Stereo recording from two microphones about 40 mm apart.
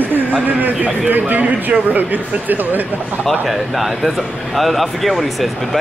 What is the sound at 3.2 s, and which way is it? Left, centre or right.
Speech, centre.